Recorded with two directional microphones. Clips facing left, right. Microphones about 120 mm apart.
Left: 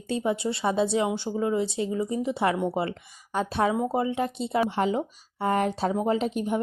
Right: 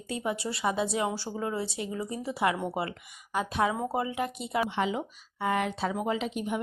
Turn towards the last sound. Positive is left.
turn(degrees=40)  # may be behind; listen again after turning